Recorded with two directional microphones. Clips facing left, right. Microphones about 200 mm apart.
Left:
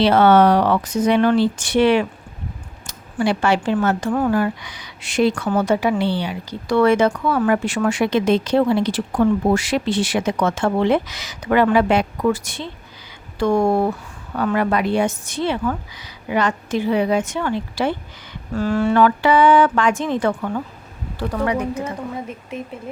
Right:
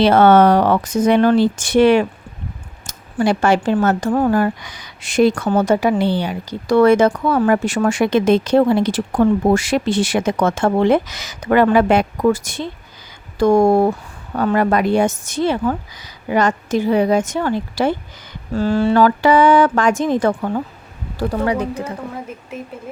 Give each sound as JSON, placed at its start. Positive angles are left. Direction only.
{"t": 0.0, "sound": "speech", "side_deg": -45}
{"t": 18.5, "sound": "speech", "side_deg": -30}
{"t": 22.3, "sound": "speech", "side_deg": 0}